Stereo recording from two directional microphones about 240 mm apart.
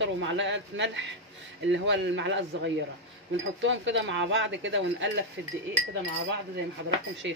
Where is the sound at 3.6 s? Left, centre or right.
Right.